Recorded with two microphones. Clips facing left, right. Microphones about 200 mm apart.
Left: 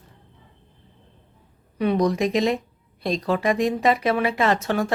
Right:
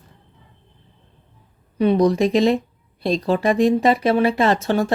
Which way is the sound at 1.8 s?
30° right (ahead or behind).